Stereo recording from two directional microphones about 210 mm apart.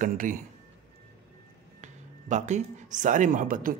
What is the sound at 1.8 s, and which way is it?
Speech, 35° right (ahead or behind).